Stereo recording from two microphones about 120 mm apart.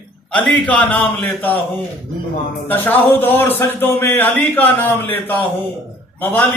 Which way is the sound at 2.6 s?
15° left (ahead or behind).